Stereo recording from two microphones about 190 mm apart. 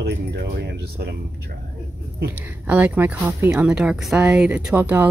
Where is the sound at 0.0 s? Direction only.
60° right (ahead or behind).